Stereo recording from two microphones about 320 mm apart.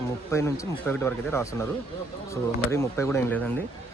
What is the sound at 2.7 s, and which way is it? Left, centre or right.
Speech, centre.